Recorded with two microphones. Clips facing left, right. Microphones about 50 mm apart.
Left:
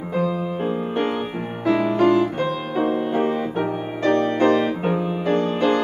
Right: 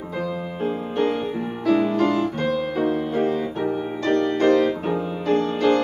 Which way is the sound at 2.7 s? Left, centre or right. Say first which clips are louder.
Left 1 dB; left.